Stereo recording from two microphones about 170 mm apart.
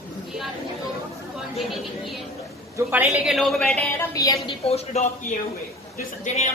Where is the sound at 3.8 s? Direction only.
15° left (ahead or behind).